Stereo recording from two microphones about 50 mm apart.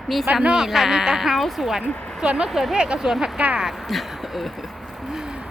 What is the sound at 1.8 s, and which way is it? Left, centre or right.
Speech, left.